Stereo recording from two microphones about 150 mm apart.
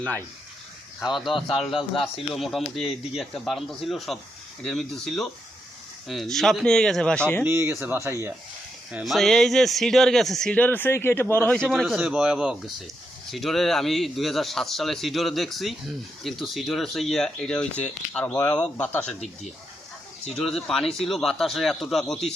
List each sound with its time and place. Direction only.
0.9 s speech: centre (ahead or behind)
7.4 s speech: 15° right (ahead or behind)
8.9 s speech: 5° right (ahead or behind)
20.3 s speech: centre (ahead or behind)